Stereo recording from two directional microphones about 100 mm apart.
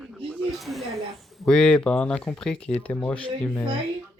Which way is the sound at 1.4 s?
5° left (ahead or behind).